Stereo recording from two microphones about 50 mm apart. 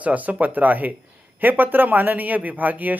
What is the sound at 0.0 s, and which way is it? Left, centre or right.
Speech, right.